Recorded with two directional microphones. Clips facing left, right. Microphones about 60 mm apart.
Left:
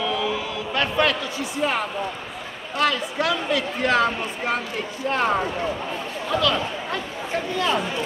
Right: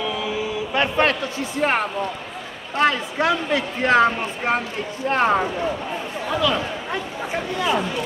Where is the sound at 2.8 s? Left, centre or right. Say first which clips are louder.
Right 3 dB; right.